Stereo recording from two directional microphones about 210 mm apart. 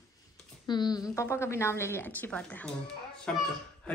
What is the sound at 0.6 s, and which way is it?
A woman's voice, 20° left (ahead or behind).